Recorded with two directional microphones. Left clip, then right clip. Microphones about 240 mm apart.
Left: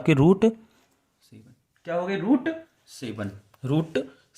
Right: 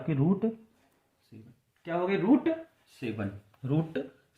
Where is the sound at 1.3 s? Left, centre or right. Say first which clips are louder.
Left 1 dB; left.